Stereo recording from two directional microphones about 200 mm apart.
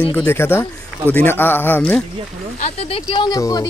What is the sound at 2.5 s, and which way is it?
Speech, 30° left (ahead or behind).